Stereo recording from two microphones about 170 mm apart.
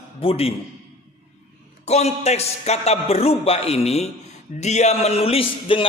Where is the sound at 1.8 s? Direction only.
40° left (ahead or behind).